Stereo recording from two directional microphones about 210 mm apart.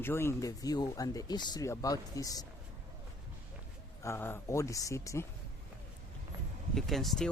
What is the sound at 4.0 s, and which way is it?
Speech, 10° left (ahead or behind).